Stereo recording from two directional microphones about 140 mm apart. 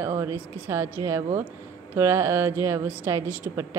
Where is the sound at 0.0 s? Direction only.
20° right (ahead or behind).